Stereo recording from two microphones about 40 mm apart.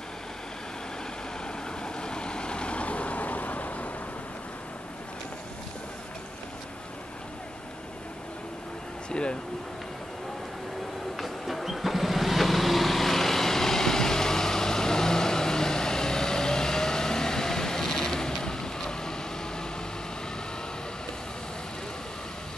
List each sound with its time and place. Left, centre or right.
1.8 s vehicle: left
9.1 s speech: left
11.1 s vehicle: centre